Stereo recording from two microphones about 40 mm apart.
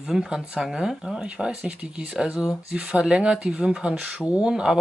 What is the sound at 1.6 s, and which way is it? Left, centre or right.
Speech, right.